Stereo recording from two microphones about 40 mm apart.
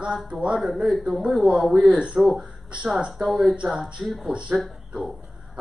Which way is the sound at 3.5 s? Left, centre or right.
Right.